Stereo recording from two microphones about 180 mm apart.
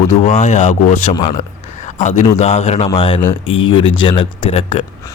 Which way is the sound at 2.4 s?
40° left (ahead or behind).